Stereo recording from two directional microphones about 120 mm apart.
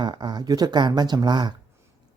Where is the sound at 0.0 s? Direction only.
40° right (ahead or behind).